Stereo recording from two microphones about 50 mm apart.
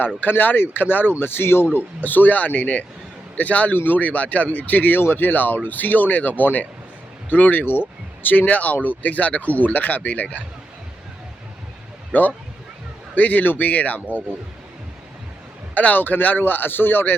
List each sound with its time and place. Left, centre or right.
0.2 s speech: left
12.1 s speech: left
15.7 s speech: left